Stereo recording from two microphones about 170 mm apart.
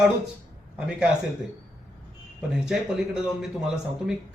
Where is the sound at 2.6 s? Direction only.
5° right (ahead or behind).